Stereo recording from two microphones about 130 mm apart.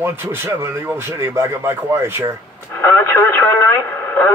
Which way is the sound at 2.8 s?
20° left (ahead or behind).